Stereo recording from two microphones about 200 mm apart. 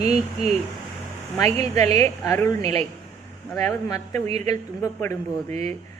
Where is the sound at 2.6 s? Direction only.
30° right (ahead or behind).